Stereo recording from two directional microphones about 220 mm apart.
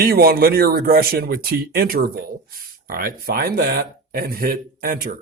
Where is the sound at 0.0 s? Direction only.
45° right (ahead or behind).